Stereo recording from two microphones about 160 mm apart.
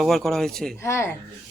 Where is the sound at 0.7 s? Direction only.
15° left (ahead or behind).